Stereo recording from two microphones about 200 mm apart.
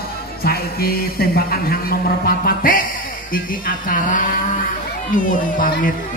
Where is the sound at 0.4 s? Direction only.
50° left (ahead or behind).